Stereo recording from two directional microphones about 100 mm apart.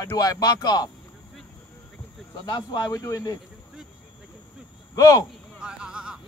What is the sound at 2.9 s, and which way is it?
Speech, 35° left (ahead or behind).